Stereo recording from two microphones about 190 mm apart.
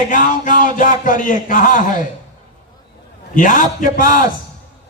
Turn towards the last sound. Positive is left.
turn(degrees=45)  # may be behind; listen again after turning